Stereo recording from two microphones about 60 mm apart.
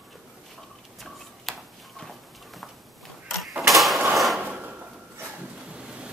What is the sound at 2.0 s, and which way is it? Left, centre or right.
Clip-clop, centre.